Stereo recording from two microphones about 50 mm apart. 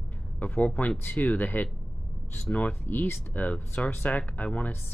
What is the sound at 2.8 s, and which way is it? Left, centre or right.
Speech, left.